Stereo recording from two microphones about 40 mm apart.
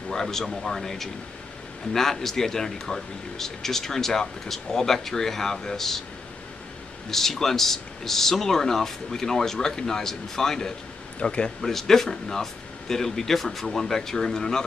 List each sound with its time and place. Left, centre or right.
0.1 s a man's voice: centre
7.1 s a man's voice: centre
11.2 s speech: left
11.6 s a man's voice: centre